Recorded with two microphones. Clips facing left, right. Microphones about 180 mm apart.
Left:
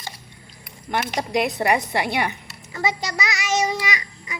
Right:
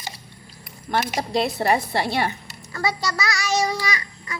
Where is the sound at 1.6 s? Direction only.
20° left (ahead or behind).